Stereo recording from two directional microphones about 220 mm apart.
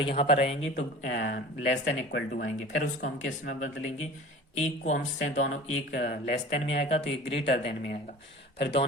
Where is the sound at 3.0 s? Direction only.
40° left (ahead or behind).